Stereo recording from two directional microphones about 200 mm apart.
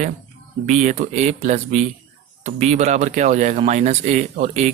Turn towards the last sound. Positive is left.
turn(degrees=-40)  # may be behind; listen again after turning